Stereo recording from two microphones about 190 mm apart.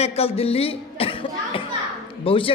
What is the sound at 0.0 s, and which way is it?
A man's voice, 35° left (ahead or behind).